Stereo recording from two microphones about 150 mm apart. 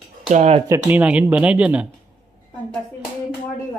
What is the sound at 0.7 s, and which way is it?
Speech, 10° right (ahead or behind).